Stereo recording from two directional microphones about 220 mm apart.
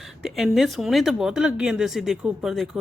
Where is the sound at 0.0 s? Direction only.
Centre (ahead or behind).